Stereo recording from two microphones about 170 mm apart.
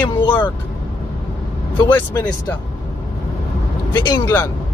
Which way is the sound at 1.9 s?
10° left (ahead or behind).